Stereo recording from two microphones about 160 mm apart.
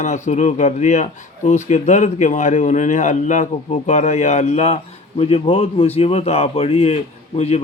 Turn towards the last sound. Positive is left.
turn(degrees=40)  # may be behind; listen again after turning